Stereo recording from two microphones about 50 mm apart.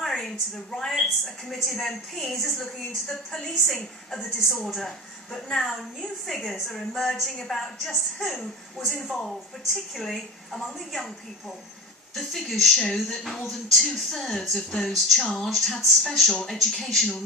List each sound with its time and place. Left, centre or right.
0.0 s a sound: centre
0.8 s a woman's voice: centre
4.2 s a woman's voice: centre
12.1 s a woman's voice: centre